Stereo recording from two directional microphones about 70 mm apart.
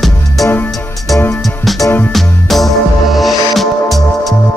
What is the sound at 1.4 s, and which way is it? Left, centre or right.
Music, centre.